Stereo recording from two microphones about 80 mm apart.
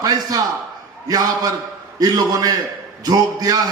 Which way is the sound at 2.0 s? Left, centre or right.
Right.